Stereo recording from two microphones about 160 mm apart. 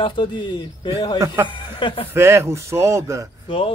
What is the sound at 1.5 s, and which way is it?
Speech, 30° left (ahead or behind).